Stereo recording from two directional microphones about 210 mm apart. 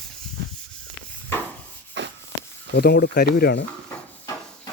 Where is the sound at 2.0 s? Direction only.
60° right (ahead or behind).